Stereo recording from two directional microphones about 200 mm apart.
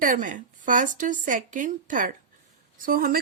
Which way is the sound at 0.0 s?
40° right (ahead or behind).